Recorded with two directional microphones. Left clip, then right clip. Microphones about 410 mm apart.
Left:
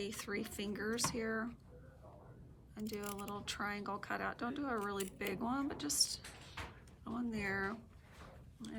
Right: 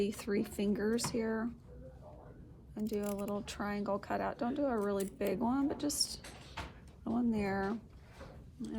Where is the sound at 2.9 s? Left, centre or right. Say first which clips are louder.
Right 7 dB; centre.